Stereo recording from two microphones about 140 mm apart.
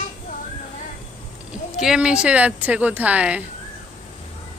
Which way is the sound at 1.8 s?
5° right (ahead or behind).